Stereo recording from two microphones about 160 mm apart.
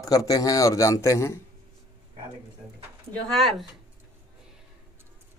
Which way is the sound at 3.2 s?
Centre (ahead or behind).